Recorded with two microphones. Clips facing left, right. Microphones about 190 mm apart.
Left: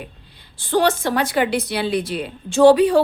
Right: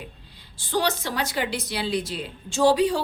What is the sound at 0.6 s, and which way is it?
A woman's voice, 55° left (ahead or behind).